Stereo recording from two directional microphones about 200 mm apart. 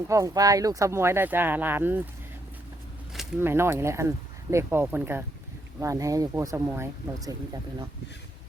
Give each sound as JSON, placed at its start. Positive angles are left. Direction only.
{"t": 0.1, "sound": "speech", "side_deg": -15}
{"t": 3.1, "sound": "a sound", "side_deg": 0}
{"t": 3.4, "sound": "speech", "side_deg": -10}